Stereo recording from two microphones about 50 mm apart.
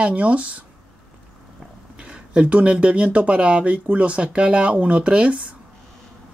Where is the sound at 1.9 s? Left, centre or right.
Centre.